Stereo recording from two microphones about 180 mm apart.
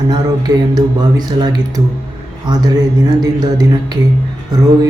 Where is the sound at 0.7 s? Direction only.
25° right (ahead or behind).